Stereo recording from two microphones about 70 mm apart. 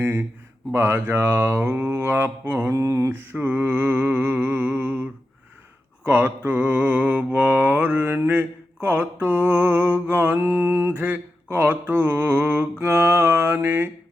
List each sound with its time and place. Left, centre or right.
0.0 s a sound: right
0.7 s mantra: right
2.6 s mantra: right
6.1 s mantra: right